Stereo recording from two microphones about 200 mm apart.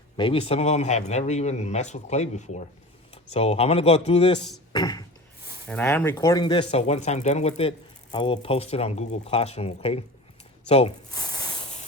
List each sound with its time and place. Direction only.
0.2 s speech: 25° left (ahead or behind)
4.7 s speech: 20° left (ahead or behind)
5.6 s speech: 5° left (ahead or behind); by 10.9 s 30° left (ahead or behind)
11.1 s snake: 20° left (ahead or behind)